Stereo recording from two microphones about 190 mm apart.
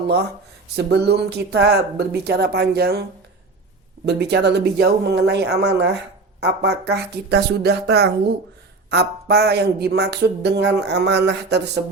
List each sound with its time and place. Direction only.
0.8 s speech: 60° right (ahead or behind)
4.0 s speech: 60° right (ahead or behind)